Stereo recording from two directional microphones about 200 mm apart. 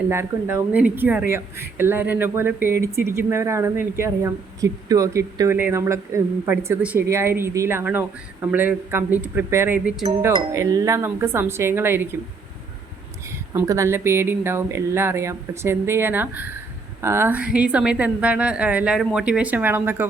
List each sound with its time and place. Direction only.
0.1 s speech: 15° right (ahead or behind)
13.5 s speech: 15° right (ahead or behind)